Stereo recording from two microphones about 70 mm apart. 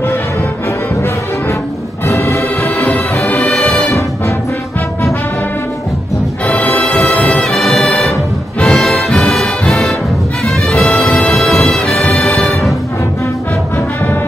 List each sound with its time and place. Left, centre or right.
2.0 s music: left
2.6 s music: left
6.4 s music: left
7.4 s brass instrument: centre
8.5 s music: centre
11.3 s music: centre